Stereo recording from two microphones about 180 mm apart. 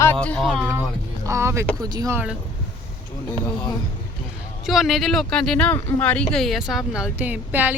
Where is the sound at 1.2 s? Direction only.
15° right (ahead or behind).